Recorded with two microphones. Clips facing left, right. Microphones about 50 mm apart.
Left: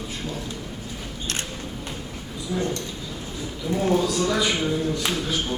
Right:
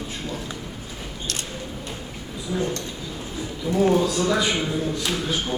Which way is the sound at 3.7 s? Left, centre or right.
Centre.